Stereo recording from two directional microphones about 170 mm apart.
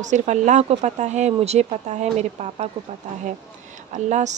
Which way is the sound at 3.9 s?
45° right (ahead or behind).